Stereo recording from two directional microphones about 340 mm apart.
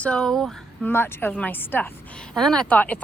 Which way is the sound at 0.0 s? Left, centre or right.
Centre.